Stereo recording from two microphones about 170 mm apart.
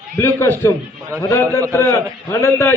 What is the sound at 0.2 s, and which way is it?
A man's voice, 15° left (ahead or behind).